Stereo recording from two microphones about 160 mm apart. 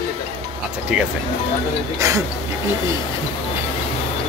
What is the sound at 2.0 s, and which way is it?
Speech, 20° right (ahead or behind).